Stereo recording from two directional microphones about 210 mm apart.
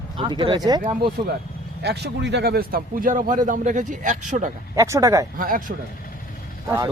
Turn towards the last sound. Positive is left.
turn(degrees=-15)  # may be behind; listen again after turning